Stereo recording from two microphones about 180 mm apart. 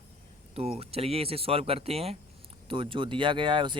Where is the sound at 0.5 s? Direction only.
35° right (ahead or behind).